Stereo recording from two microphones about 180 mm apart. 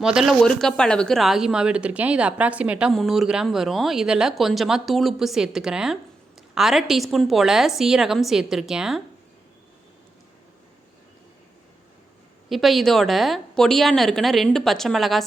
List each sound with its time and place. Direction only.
0.0 s speech: 5° right (ahead or behind)
12.5 s speech: centre (ahead or behind)